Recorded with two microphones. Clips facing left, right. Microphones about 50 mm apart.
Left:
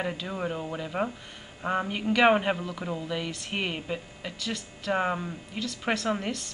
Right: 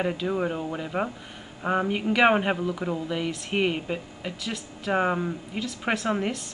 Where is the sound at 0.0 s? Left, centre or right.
Centre.